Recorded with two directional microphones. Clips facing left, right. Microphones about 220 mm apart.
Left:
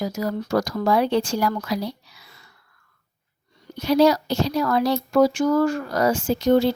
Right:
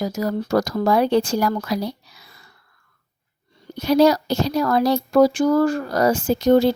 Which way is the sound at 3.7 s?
45° right (ahead or behind).